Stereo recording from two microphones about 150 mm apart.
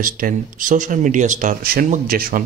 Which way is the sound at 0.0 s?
65° right (ahead or behind).